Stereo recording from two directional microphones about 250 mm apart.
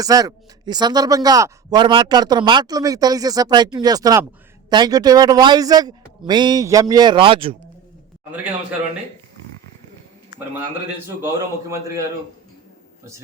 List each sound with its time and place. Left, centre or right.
0.0 s speech: centre
11.7 s speech: centre